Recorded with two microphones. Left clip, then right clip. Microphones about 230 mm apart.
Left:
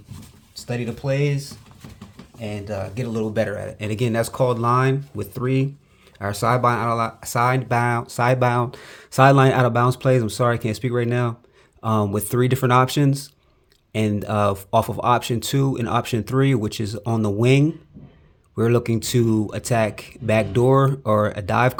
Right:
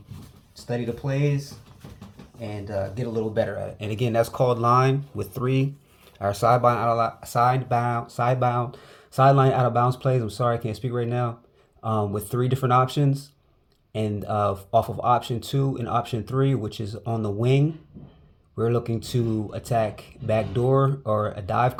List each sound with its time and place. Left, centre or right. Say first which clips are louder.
1.0 s speech: left 11 dB; left
2.4 s speech: left 1 dB; left